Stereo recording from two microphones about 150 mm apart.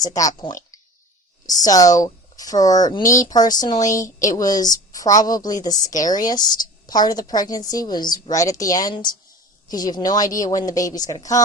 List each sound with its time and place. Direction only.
0.0 s speech: 25° left (ahead or behind)